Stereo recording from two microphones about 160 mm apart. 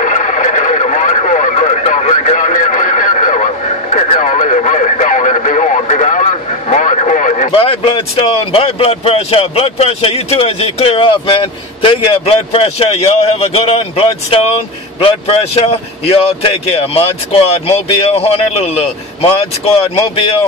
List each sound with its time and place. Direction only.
0.0 s radio: 50° left (ahead or behind)
7.5 s speech: 35° left (ahead or behind)